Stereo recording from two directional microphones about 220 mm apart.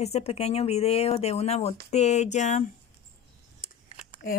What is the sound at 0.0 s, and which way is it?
Speech, 30° left (ahead or behind).